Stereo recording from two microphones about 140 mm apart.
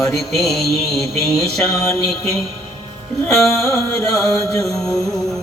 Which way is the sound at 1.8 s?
25° left (ahead or behind).